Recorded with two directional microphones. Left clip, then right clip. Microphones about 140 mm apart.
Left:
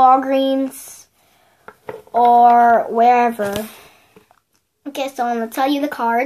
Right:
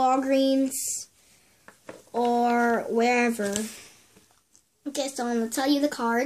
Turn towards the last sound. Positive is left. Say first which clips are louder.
# left 7 dB
turn(degrees=-10)  # may be behind; listen again after turning